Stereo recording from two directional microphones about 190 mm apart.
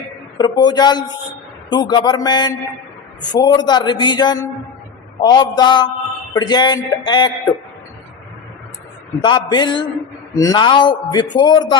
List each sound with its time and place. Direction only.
0.3 s a man's voice: 20° left (ahead or behind)
9.2 s a man's voice: 25° left (ahead or behind)